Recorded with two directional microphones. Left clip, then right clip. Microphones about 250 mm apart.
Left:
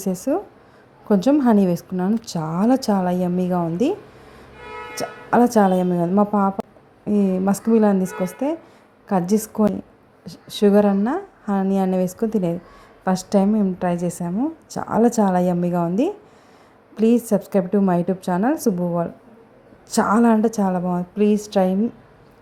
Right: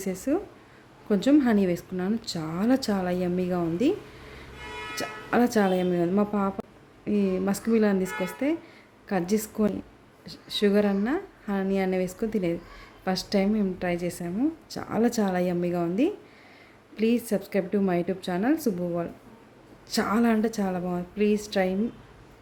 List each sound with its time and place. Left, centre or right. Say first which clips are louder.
0.0 s a woman's voice: left 6 dB; centre
20.1 s a woman's voice: left 7 dB; centre